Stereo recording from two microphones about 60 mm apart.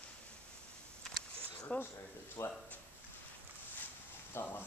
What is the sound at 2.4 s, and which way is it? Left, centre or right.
Speech, left.